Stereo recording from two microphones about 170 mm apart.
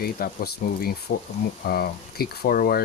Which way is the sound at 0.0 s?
65° left (ahead or behind).